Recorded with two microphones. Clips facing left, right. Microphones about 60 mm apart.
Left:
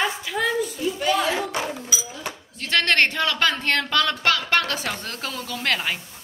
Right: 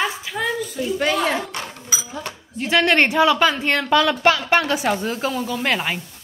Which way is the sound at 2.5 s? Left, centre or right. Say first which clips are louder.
Right 4 dB; centre.